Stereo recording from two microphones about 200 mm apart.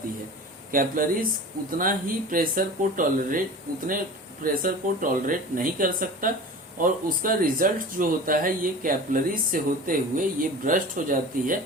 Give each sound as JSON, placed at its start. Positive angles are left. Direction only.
{"t": 0.7, "sound": "speech", "side_deg": -45}
{"t": 4.4, "sound": "speech", "side_deg": -45}